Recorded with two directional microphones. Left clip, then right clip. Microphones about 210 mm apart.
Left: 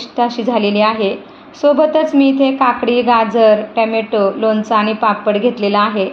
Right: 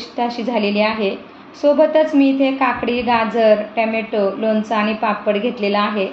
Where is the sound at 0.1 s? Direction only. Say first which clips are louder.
Left 5 dB; 35° left (ahead or behind).